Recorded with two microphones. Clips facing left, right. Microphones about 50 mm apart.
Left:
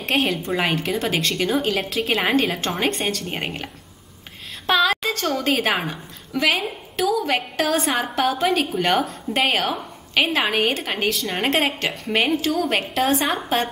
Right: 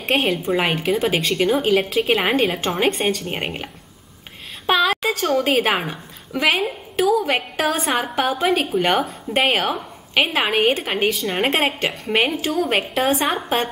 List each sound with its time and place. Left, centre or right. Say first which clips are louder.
0.0 s a woman's voice: right 2 dB; centre